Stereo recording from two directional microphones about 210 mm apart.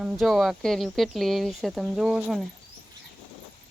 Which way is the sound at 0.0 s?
Centre (ahead or behind).